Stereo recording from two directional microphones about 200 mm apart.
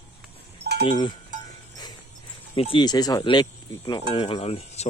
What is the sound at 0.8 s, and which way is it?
Speech, 25° left (ahead or behind).